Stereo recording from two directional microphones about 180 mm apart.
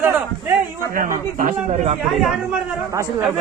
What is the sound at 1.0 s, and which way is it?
Speech, 50° right (ahead or behind).